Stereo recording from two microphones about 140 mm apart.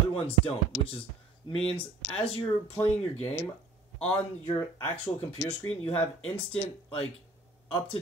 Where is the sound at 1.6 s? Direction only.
45° left (ahead or behind).